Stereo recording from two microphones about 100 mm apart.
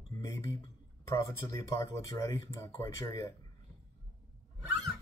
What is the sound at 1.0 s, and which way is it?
Speech, 30° left (ahead or behind).